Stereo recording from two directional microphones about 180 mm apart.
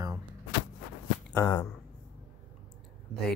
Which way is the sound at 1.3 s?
20° left (ahead or behind).